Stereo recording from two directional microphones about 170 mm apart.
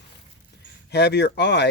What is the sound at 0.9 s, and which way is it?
Speech, 80° left.